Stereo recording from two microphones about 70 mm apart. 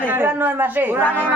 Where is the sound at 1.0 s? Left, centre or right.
Left.